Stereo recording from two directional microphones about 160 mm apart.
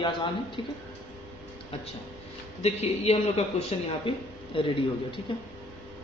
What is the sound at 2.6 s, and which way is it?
A man's voice, 40° left (ahead or behind).